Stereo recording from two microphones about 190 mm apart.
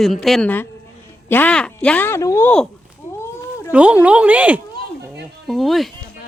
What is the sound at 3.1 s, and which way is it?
Cat, 15° left (ahead or behind).